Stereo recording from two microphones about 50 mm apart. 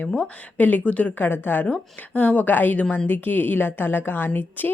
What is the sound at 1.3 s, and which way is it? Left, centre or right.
Speech, left.